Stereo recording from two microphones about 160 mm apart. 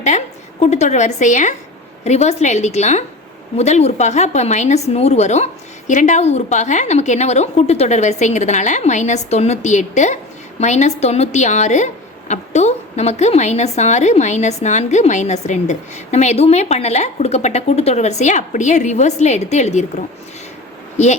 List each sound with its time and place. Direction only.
0.6 s a woman's voice: 45° left (ahead or behind)